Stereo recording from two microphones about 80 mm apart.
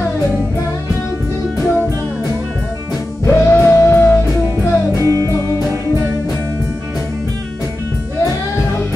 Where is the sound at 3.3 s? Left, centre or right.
Left.